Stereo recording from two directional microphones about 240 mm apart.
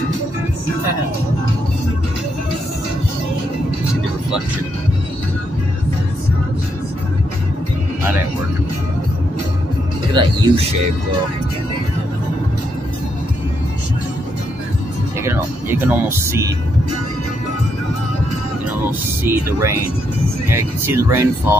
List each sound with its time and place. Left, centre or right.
10.1 s speech: right
15.2 s speech: centre
18.9 s speech: centre